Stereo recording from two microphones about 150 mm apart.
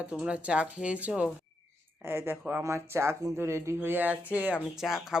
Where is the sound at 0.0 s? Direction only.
10° right (ahead or behind).